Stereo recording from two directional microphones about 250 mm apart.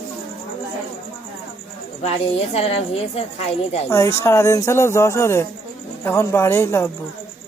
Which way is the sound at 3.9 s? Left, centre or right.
Centre.